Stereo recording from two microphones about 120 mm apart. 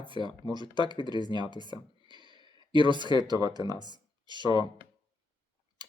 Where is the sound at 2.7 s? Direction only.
40° right (ahead or behind).